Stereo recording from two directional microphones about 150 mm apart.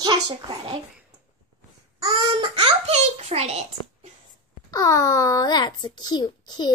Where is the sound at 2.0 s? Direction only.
35° right (ahead or behind).